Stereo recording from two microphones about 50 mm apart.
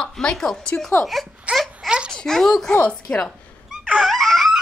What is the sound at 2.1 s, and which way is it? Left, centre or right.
Speech, centre.